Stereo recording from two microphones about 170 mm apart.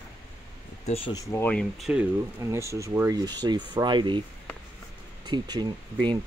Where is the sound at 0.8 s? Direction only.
35° left (ahead or behind).